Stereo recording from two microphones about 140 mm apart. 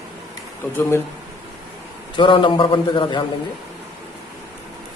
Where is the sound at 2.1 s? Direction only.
35° left (ahead or behind).